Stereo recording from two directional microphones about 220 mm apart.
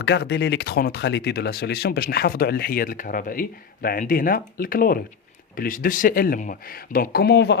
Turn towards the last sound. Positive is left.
turn(degrees=45)  # may be behind; listen again after turning